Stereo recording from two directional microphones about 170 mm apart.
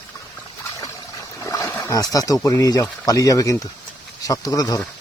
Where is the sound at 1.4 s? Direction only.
20° left (ahead or behind).